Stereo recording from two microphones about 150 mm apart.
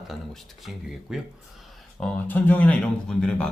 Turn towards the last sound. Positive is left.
turn(degrees=5)  # may be behind; listen again after turning